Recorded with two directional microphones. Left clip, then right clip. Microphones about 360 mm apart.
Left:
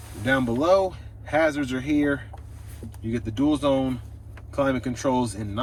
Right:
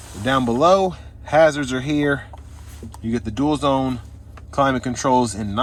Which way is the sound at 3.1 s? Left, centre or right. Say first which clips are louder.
Right 3 dB; centre.